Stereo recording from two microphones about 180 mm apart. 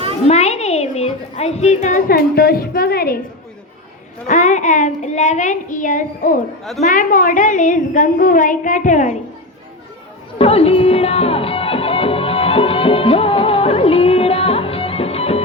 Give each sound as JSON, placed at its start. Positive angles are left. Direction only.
{"t": 0.3, "sound": "a woman's voice", "side_deg": 40}
{"t": 4.3, "sound": "a woman's voice", "side_deg": 40}
{"t": 10.3, "sound": "music", "side_deg": 35}